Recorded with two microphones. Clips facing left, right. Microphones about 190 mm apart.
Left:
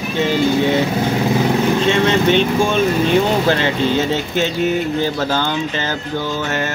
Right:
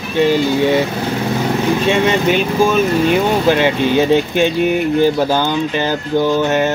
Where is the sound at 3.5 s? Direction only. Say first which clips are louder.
Right 3 dB; 15° right (ahead or behind).